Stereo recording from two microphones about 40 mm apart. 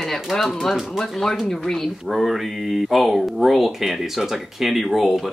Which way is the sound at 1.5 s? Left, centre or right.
Centre.